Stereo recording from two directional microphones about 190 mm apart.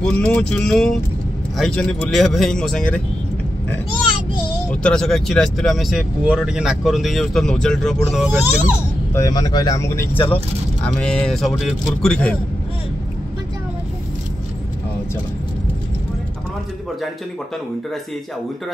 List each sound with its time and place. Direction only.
0.2 s speech: 5° left (ahead or behind)
4.8 s speech: 5° left (ahead or behind)
9.1 s speech: 20° left (ahead or behind)
10.1 s speech: 30° left (ahead or behind)
10.8 s speech: 5° left (ahead or behind)